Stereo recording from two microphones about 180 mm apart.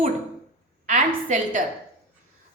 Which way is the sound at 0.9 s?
45° right (ahead or behind).